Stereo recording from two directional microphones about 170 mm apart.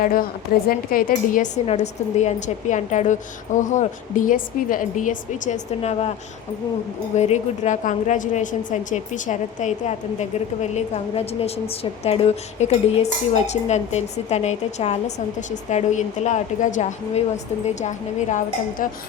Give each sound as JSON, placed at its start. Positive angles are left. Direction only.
{"t": 0.0, "sound": "a woman's voice", "side_deg": 55}
{"t": 7.2, "sound": "a woman's voice", "side_deg": 40}